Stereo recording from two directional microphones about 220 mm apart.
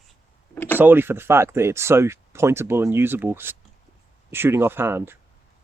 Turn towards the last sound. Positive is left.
turn(degrees=-10)  # may be behind; listen again after turning